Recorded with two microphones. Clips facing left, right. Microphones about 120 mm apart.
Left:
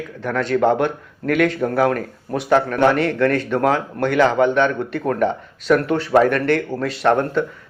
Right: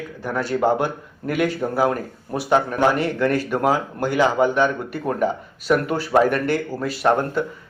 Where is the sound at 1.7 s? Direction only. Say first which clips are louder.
Left 2 dB; 25° right (ahead or behind).